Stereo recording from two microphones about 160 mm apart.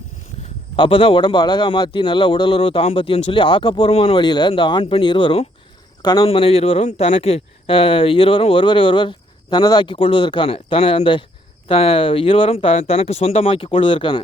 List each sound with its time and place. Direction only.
0.8 s speech: 35° left (ahead or behind)